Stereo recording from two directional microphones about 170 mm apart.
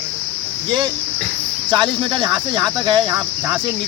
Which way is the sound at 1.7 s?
25° right (ahead or behind).